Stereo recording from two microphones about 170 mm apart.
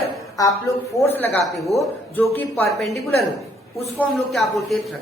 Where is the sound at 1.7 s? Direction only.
20° right (ahead or behind).